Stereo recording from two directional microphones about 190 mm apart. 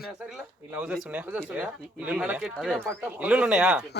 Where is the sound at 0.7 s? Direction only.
5° right (ahead or behind).